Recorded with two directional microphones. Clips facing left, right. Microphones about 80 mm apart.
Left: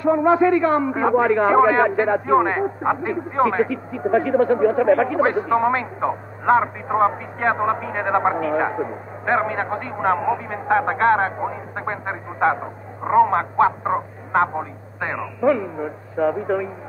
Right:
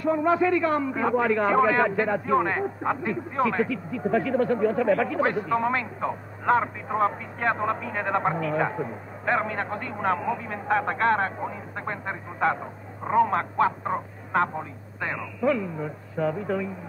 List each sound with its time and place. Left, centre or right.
0.0 s a man's voice: left